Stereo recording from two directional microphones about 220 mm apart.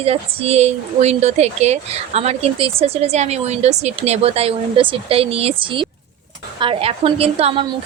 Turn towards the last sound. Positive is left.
turn(degrees=-25)  # may be behind; listen again after turning